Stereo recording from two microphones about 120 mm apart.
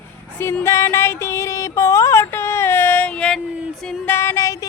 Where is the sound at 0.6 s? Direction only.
25° left (ahead or behind); by 3.4 s 5° left (ahead or behind).